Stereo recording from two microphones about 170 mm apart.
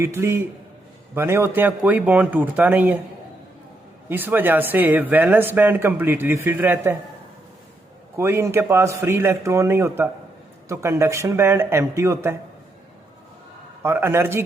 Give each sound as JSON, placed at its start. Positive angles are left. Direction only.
{"t": 0.0, "sound": "speech", "side_deg": -15}
{"t": 4.1, "sound": "speech", "side_deg": -10}
{"t": 8.1, "sound": "speech", "side_deg": -15}
{"t": 13.8, "sound": "speech", "side_deg": -15}